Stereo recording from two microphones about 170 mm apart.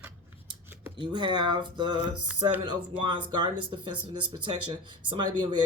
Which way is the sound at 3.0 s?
30° right (ahead or behind).